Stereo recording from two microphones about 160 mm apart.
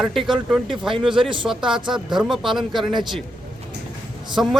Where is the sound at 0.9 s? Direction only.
30° right (ahead or behind).